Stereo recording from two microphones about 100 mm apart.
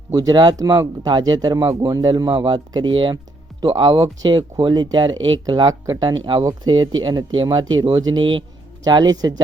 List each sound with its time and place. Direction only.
0.1 s speech: 40° right (ahead or behind)
8.1 s speech: 55° right (ahead or behind)
8.8 s speech: 45° right (ahead or behind)